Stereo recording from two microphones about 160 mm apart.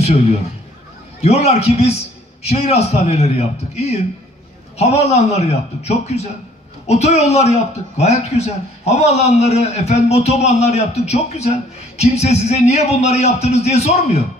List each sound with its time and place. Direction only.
0.0 s a man's voice: 40° left (ahead or behind)